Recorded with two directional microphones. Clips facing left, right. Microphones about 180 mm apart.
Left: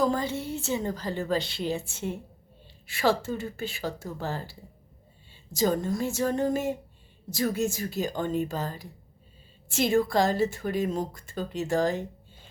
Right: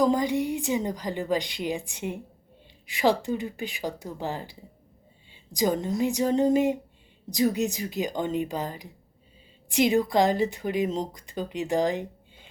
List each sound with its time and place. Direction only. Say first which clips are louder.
0.0 s speech: right 4 dB; 15° right (ahead or behind)